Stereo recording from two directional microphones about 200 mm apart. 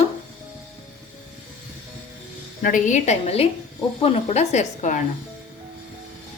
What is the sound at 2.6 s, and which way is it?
Speech, 45° left (ahead or behind).